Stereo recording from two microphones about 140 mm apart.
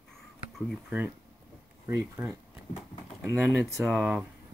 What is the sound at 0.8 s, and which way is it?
Speech, 15° right (ahead or behind).